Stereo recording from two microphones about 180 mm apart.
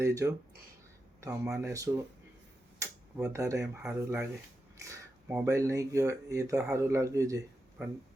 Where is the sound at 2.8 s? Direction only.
15° right (ahead or behind).